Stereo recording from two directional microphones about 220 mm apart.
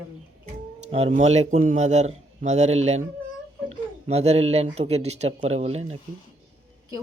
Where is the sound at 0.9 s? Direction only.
25° right (ahead or behind).